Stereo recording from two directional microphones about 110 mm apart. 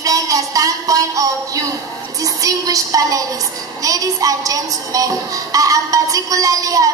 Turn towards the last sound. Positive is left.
turn(degrees=-35)  # may be behind; listen again after turning